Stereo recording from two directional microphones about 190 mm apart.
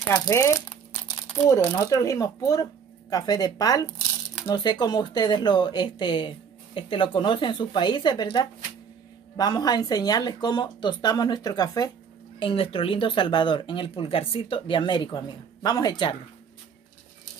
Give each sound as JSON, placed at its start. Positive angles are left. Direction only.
{"t": 0.1, "sound": "speech", "side_deg": 20}